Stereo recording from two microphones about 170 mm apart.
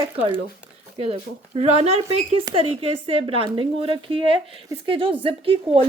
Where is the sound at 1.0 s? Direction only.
35° right (ahead or behind).